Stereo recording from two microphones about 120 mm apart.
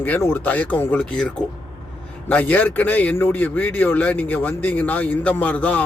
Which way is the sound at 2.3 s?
15° left (ahead or behind).